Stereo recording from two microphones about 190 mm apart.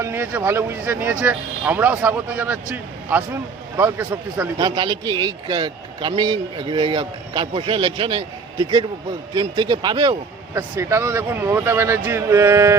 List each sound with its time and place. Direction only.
0.0 s speech: 10° right (ahead or behind)
4.5 s a man's voice: 25° right (ahead or behind)
10.5 s speech: 15° right (ahead or behind)